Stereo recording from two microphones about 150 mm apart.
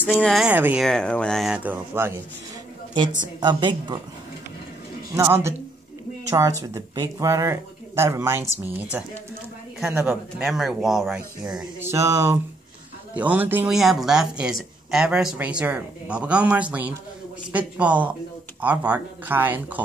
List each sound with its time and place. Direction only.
0.0 s speech: 5° left (ahead or behind)
0.5 s speech: 10° right (ahead or behind)
0.8 s speech: 5° left (ahead or behind); by 2.1 s 15° right (ahead or behind)
3.3 s speech: 30° right (ahead or behind)
5.1 s speech: 20° right (ahead or behind)
10.0 s speech: centre (ahead or behind)
11.8 s speech: 20° right (ahead or behind)